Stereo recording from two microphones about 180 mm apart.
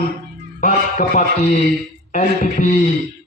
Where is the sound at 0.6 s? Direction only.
45° left (ahead or behind).